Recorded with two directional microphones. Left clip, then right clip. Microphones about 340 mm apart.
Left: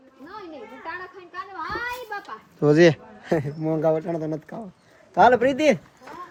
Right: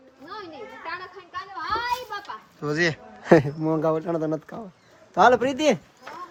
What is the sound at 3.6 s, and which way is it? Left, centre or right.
Speech, centre.